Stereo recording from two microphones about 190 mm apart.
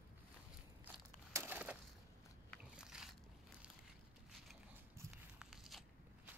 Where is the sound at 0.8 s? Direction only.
10° right (ahead or behind).